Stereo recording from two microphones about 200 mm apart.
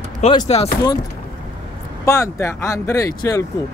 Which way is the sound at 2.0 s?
15° left (ahead or behind).